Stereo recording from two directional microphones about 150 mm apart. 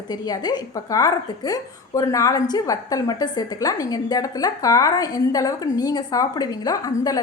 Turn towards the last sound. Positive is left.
turn(degrees=25)  # may be behind; listen again after turning